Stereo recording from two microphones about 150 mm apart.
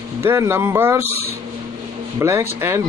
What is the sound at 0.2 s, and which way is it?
Speech, 20° right (ahead or behind).